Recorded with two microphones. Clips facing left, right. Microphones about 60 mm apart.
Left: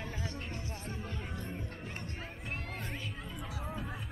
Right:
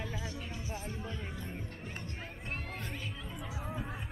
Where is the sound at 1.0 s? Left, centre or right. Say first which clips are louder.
Even; left.